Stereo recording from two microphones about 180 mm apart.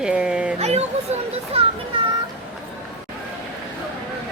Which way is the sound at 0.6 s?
35° right (ahead or behind).